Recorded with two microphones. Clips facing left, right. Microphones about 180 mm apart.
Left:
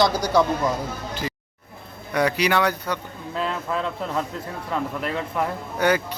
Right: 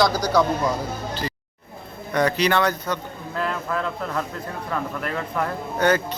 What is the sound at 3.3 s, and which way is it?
Speech, 25° left (ahead or behind).